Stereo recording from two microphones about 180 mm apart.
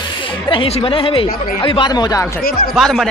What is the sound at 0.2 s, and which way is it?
A woman's voice, 30° left (ahead or behind).